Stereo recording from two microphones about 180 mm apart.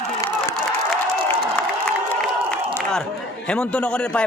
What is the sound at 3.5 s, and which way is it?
Speech, 5° left (ahead or behind).